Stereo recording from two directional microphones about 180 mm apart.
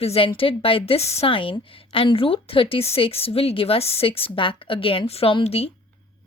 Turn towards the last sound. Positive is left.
turn(degrees=30)  # may be behind; listen again after turning